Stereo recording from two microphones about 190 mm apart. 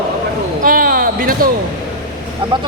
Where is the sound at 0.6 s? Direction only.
50° right (ahead or behind).